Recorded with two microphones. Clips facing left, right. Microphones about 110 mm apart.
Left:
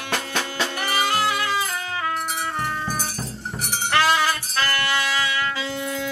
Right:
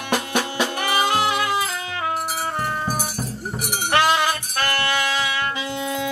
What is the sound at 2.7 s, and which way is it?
Music, 15° right (ahead or behind).